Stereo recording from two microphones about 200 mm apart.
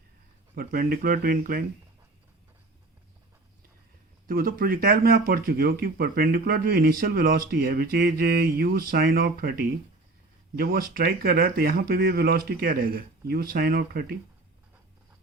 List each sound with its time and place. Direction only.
0.5 s speech: 50° right (ahead or behind)
4.3 s speech: 45° right (ahead or behind)